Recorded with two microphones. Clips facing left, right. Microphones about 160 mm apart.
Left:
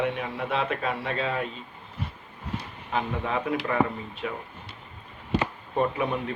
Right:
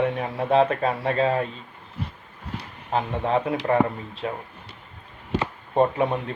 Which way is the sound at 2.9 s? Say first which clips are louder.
Right 5 dB; 35° right (ahead or behind).